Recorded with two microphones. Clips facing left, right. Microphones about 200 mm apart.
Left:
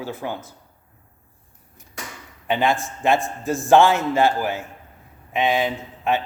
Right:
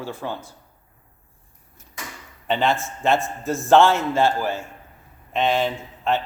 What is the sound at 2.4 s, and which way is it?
A man's voice, 15° left (ahead or behind).